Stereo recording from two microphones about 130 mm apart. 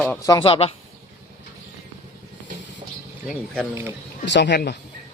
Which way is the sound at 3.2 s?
10° left (ahead or behind).